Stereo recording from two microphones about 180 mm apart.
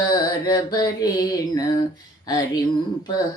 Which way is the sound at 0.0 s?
20° left (ahead or behind).